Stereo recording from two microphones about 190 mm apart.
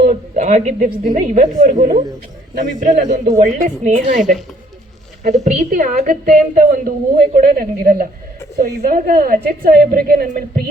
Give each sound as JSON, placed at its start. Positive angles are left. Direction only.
{"t": 0.0, "sound": "a woman's voice", "side_deg": -45}
{"t": 5.4, "sound": "a woman's voice", "side_deg": -45}